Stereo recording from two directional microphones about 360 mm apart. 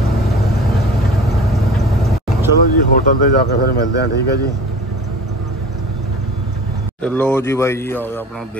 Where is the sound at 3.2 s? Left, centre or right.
Left.